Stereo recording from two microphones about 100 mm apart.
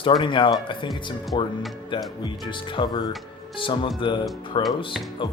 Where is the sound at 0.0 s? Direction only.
55° left (ahead or behind).